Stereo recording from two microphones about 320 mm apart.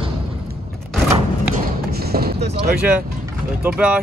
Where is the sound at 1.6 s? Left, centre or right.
Right.